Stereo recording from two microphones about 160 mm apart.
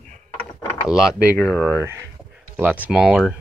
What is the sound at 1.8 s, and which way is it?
Speech, 15° right (ahead or behind).